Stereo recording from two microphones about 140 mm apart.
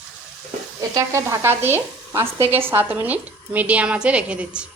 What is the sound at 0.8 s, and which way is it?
Speech, 25° right (ahead or behind).